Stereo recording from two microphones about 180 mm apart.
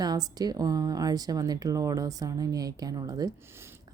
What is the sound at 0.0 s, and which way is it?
Speech, 20° right (ahead or behind).